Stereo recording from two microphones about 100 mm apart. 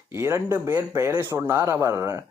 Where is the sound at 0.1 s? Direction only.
25° right (ahead or behind).